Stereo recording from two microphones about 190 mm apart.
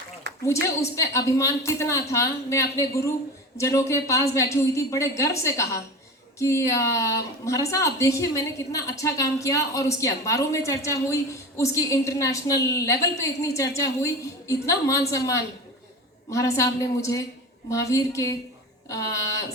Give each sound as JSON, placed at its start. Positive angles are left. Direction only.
{"t": 0.4, "sound": "a woman's voice", "side_deg": 15}